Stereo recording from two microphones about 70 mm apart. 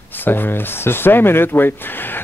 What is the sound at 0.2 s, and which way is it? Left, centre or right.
Speech, left.